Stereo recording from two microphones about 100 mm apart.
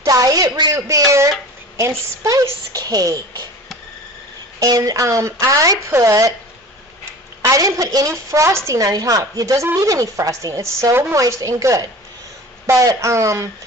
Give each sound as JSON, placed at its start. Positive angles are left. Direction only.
{"t": 0.0, "sound": "a sound", "side_deg": -40}
{"t": 1.8, "sound": "a woman's voice", "side_deg": -30}
{"t": 4.6, "sound": "a woman's voice", "side_deg": -40}
{"t": 7.4, "sound": "a woman's voice", "side_deg": -35}